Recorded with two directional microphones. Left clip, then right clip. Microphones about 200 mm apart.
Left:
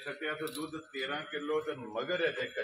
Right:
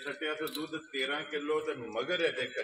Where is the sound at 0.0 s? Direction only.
35° right (ahead or behind).